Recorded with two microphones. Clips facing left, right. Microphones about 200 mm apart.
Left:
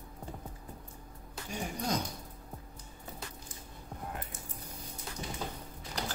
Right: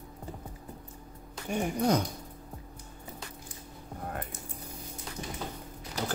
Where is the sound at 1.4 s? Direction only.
60° right (ahead or behind).